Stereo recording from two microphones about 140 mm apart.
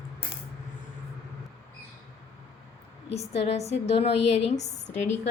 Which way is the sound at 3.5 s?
50° left (ahead or behind).